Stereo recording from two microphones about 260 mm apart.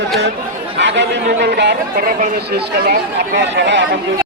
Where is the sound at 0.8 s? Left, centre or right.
Right.